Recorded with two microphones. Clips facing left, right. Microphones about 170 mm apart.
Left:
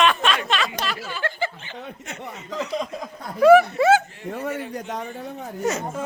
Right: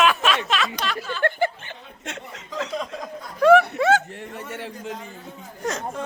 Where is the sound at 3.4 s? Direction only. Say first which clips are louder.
Left 2 dB; 5° left (ahead or behind).